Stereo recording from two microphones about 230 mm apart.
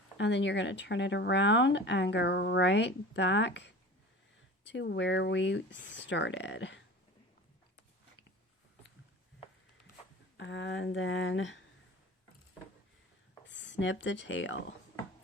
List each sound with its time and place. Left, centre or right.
0.2 s speech: left
10.3 s speech: left
13.4 s speech: left